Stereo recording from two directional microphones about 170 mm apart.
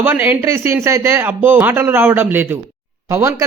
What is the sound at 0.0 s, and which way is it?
Speech, 10° right (ahead or behind).